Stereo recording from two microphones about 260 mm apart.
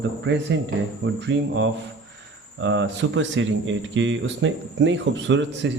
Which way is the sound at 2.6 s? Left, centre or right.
Right.